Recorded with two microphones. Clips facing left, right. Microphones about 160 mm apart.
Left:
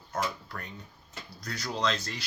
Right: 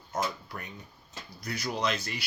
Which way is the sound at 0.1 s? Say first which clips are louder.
Even; 15° right (ahead or behind).